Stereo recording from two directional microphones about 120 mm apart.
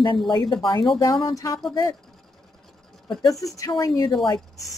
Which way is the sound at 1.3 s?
25° left (ahead or behind).